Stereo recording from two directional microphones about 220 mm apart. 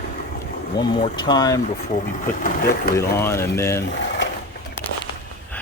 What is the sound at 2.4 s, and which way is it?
Speech, 40° left (ahead or behind).